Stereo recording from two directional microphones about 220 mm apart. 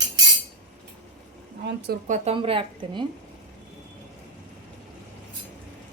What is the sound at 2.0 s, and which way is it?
Speech, 30° right (ahead or behind).